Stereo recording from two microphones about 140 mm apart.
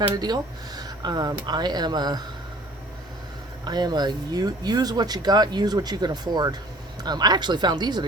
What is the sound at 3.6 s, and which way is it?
Speech, 30° right (ahead or behind).